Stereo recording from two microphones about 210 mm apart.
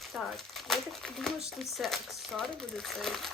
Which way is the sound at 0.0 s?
Centre (ahead or behind).